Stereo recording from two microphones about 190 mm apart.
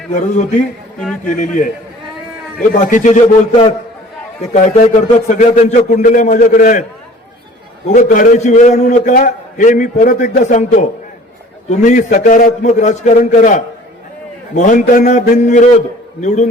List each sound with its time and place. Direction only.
0.1 s a man's voice: 40° left (ahead or behind)
7.9 s a man's voice: 45° left (ahead or behind)